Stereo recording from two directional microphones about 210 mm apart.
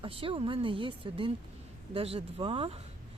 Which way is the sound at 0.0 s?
25° right (ahead or behind).